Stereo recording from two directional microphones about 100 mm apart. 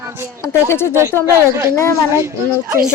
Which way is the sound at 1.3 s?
30° right (ahead or behind).